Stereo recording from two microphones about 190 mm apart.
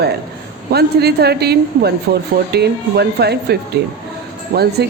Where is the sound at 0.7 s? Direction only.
55° right (ahead or behind).